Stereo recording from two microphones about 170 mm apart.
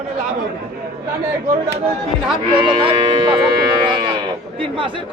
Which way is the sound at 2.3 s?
30° right (ahead or behind).